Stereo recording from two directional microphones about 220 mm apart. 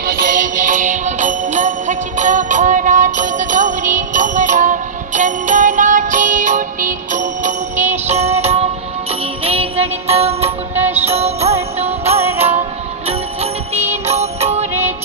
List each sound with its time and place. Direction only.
0.0 s music: 40° right (ahead or behind)
10.8 s music: 10° right (ahead or behind)
11.0 s music: 30° right (ahead or behind)
12.2 s music: 10° right (ahead or behind)
13.1 s music: 25° right (ahead or behind)